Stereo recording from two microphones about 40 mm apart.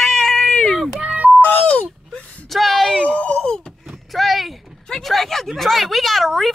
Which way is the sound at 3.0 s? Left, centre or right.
Left.